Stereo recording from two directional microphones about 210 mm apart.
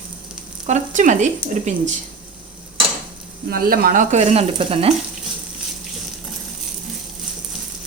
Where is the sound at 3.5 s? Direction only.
45° right (ahead or behind); by 4.9 s 25° right (ahead or behind).